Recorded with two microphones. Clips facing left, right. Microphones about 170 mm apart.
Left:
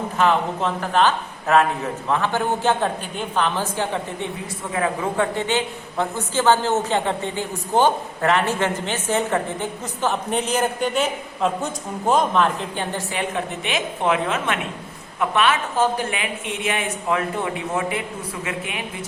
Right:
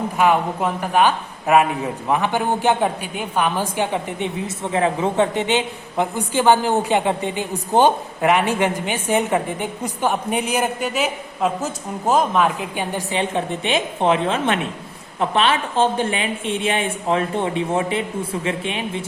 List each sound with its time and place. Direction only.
0.2 s a man's voice: 10° right (ahead or behind); by 19.0 s 25° right (ahead or behind)